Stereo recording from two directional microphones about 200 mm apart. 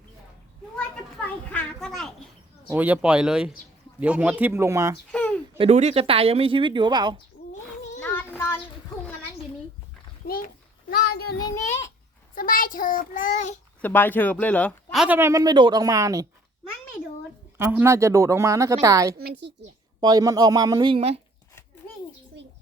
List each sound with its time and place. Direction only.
1.5 s a sound: centre (ahead or behind)
2.6 s speech: 10° right (ahead or behind)
5.5 s speech: 30° right (ahead or behind)
8.0 s child singing: 10° left (ahead or behind)
10.2 s a sound: 50° left (ahead or behind)
10.8 s child singing: 50° left (ahead or behind)
11.4 s a sound: 15° left (ahead or behind)
12.3 s a child's voice: 45° left (ahead or behind)
13.8 s speech: 10° left (ahead or behind)
15.0 s speech: 10° right (ahead or behind)
17.6 s speech: 10° right (ahead or behind)
19.1 s a woman's voice: 50° right (ahead or behind)
20.0 s speech: 20° right (ahead or behind)